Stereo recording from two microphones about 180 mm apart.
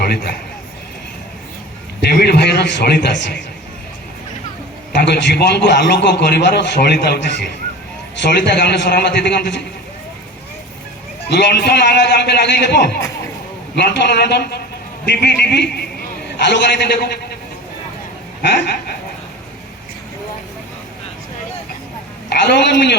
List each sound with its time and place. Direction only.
0.0 s a man's voice: 60° left (ahead or behind)
2.0 s a man's voice: 65° left (ahead or behind)
4.9 s a man's voice: 70° left (ahead or behind)
8.4 s a man's voice: 65° left (ahead or behind)
11.3 s a man's voice: 65° left (ahead or behind)
18.4 s a man's voice: 65° left (ahead or behind)
22.3 s a man's voice: 65° left (ahead or behind)